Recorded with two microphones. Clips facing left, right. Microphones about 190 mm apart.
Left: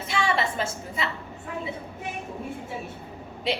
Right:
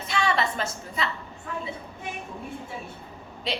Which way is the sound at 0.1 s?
25° left (ahead or behind).